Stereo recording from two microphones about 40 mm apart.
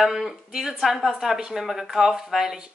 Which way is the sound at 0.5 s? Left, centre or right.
Centre.